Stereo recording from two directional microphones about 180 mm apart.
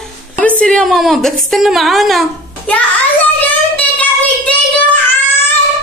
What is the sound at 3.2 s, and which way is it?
Child singing, 10° left (ahead or behind).